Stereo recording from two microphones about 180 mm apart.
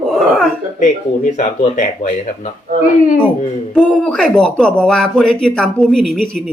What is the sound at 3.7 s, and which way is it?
Speech, centre (ahead or behind).